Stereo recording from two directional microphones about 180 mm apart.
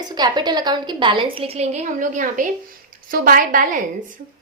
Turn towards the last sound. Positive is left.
turn(degrees=-50)  # may be behind; listen again after turning